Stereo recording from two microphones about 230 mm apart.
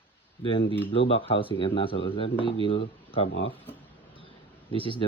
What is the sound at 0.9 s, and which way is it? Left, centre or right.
Speech, left.